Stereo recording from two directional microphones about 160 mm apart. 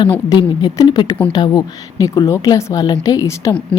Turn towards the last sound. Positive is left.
turn(degrees=20)  # may be behind; listen again after turning